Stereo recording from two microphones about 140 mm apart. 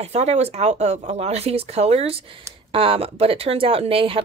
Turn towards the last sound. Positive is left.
turn(degrees=-40)  # may be behind; listen again after turning